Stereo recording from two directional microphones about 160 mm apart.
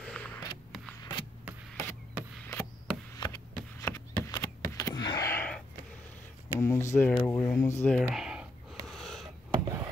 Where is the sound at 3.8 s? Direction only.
20° left (ahead or behind).